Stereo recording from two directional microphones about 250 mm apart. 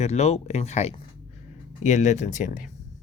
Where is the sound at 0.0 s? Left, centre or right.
Left.